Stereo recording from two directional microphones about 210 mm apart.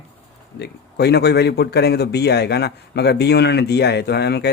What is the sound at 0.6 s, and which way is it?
Speech, 50° left (ahead or behind).